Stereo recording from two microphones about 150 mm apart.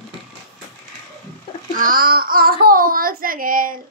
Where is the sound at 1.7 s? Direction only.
70° right (ahead or behind).